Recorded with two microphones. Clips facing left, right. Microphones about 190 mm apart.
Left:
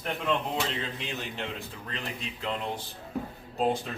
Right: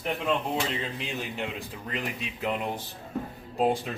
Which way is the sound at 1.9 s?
10° right (ahead or behind).